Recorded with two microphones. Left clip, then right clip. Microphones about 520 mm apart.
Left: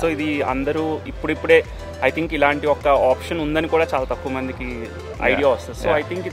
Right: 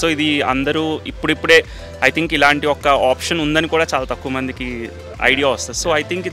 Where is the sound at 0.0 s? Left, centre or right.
Right.